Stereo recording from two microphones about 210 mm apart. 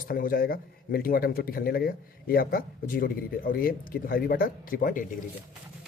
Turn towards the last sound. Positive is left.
turn(degrees=40)  # may be behind; listen again after turning